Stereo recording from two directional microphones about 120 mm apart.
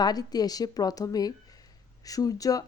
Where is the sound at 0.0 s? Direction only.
35° left (ahead or behind).